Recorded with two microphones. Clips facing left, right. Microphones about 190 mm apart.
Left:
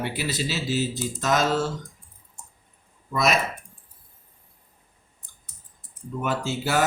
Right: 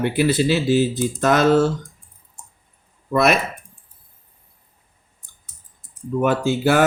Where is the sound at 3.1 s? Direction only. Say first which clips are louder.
Right 6 dB; 60° right (ahead or behind).